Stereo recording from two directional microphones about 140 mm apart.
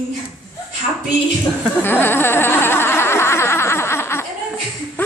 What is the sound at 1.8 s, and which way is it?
Insect, 15° left (ahead or behind).